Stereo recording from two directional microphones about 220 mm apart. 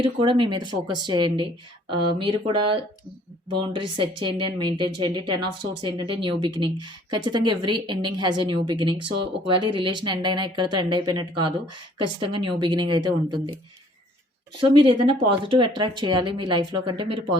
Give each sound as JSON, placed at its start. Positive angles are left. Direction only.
{"t": 0.0, "sound": "speech", "side_deg": -25}
{"t": 14.6, "sound": "speech", "side_deg": -25}